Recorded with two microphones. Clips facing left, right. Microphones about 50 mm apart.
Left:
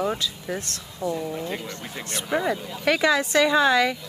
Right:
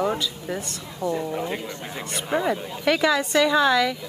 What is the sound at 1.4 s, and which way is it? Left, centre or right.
Speech, centre.